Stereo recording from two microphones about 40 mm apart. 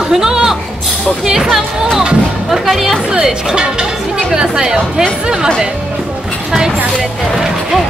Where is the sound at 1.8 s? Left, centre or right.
Centre.